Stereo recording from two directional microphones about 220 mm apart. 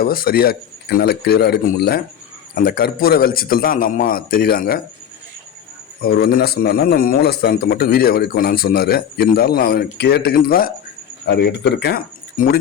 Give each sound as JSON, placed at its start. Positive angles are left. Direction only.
{"t": 0.0, "sound": "a man's voice", "side_deg": 40}
{"t": 6.0, "sound": "speech", "side_deg": 45}